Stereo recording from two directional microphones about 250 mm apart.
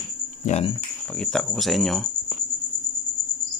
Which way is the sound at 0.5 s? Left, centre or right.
Left.